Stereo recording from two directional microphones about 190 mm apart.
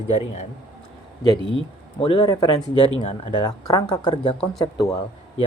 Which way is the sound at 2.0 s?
25° left (ahead or behind).